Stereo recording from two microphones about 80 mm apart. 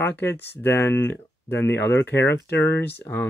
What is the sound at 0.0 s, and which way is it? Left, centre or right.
Speech, left.